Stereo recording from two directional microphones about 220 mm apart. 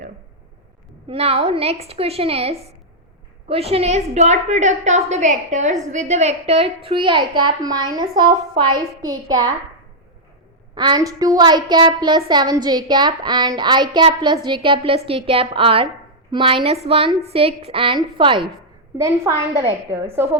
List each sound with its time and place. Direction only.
1.0 s a woman's voice: 25° right (ahead or behind)
10.8 s a woman's voice: 20° right (ahead or behind)